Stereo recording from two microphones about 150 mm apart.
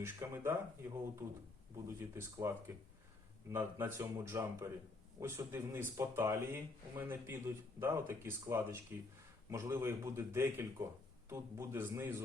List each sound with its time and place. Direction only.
0.0 s speech: 15° right (ahead or behind)